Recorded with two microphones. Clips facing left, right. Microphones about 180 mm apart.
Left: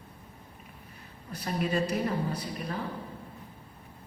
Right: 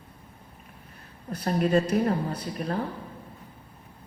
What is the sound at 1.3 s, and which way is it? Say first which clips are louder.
A woman's voice: right 7 dB; 50° right (ahead or behind).